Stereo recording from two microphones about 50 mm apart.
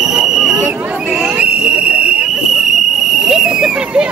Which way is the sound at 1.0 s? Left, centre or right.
Centre.